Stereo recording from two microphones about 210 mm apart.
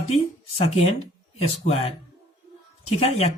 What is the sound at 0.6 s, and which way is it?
Speech, 30° left (ahead or behind).